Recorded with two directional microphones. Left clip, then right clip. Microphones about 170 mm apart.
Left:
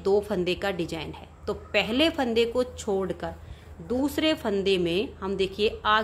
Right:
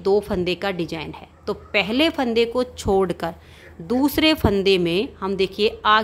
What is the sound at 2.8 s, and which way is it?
A woman's voice, 40° right (ahead or behind).